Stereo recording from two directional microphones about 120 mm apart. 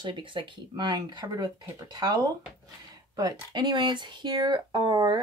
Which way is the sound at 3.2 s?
35° right (ahead or behind).